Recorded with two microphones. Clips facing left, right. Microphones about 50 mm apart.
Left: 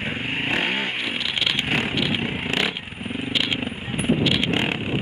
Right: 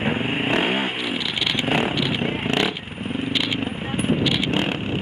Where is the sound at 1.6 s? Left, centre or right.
Centre.